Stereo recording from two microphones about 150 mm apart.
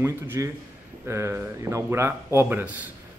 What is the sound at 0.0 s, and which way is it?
Speech, 15° right (ahead or behind).